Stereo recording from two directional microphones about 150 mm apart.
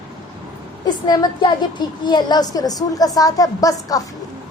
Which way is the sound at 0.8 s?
25° left (ahead or behind).